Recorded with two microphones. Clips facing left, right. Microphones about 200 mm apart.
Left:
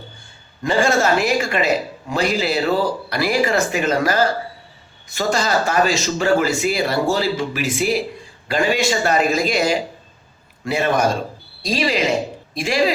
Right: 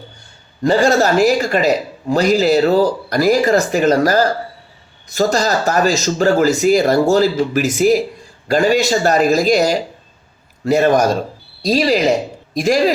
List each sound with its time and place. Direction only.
0.6 s a man's voice: 40° right (ahead or behind)